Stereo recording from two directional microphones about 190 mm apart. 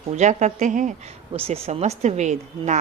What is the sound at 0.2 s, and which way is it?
A woman's voice, 40° right (ahead or behind).